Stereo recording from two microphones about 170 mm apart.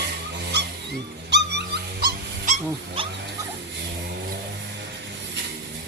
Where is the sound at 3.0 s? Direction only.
30° right (ahead or behind).